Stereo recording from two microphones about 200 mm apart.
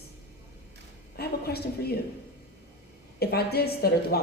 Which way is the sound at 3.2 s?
50° left (ahead or behind).